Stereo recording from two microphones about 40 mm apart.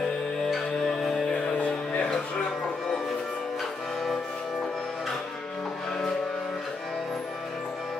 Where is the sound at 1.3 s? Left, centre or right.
Left.